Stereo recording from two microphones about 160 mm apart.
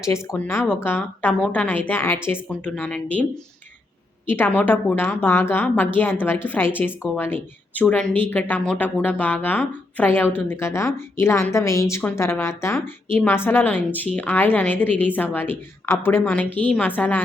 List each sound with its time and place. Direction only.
0.0 s a woman's voice: 20° left (ahead or behind)